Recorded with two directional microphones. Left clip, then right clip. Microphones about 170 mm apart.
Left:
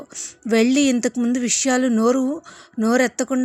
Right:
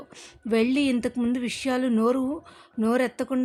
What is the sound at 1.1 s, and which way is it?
A woman's voice, 10° left (ahead or behind).